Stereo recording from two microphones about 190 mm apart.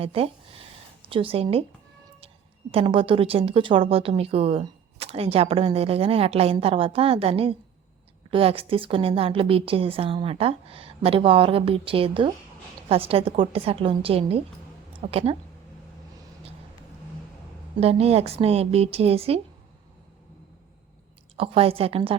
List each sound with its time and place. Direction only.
0.0 s a woman's voice: 30° right (ahead or behind)
2.7 s a woman's voice: 30° right (ahead or behind)
17.7 s speech: 30° right (ahead or behind)
21.3 s a woman's voice: 30° right (ahead or behind)